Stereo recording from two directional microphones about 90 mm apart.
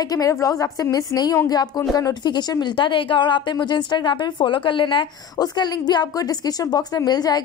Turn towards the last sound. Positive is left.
turn(degrees=45)  # may be behind; listen again after turning